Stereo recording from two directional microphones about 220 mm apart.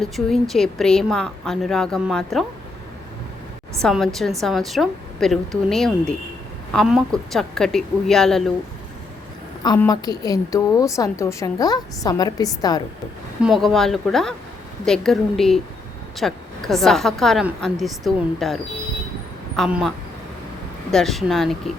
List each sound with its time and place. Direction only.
0.0 s a woman's voice: centre (ahead or behind)
3.8 s a woman's voice: centre (ahead or behind)
9.6 s a woman's voice: 15° left (ahead or behind)
13.4 s a woman's voice: centre (ahead or behind)
20.9 s a woman's voice: centre (ahead or behind)